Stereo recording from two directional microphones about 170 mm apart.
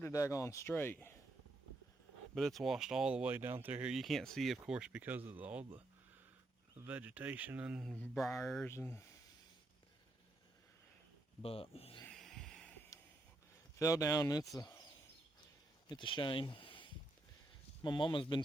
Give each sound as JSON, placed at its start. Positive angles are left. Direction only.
{"t": 0.0, "sound": "speech", "side_deg": 15}
{"t": 2.3, "sound": "speech", "side_deg": 0}
{"t": 8.6, "sound": "speech", "side_deg": 15}
{"t": 11.4, "sound": "speech", "side_deg": 35}
{"t": 12.0, "sound": "a sound", "side_deg": 0}
{"t": 12.9, "sound": "a sound", "side_deg": 20}
{"t": 13.7, "sound": "speech", "side_deg": 20}
{"t": 15.9, "sound": "speech", "side_deg": 30}